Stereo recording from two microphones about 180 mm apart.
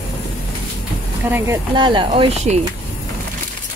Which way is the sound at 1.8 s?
25° right (ahead or behind).